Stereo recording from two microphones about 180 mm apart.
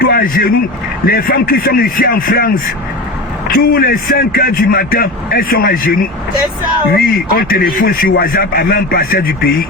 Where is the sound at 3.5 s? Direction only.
55° left (ahead or behind).